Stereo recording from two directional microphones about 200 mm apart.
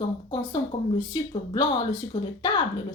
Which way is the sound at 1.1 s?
25° left (ahead or behind).